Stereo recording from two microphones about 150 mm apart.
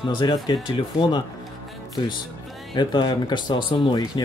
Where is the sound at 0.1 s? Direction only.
30° left (ahead or behind).